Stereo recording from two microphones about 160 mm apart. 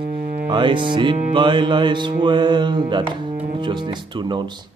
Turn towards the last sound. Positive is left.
turn(degrees=-30)  # may be behind; listen again after turning